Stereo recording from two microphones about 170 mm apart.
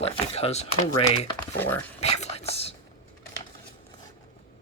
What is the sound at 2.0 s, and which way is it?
Whispering, 40° left (ahead or behind).